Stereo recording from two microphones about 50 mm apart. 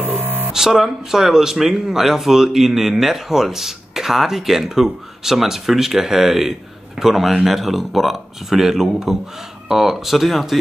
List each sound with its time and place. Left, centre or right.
0.2 s music: right
0.5 s speech: centre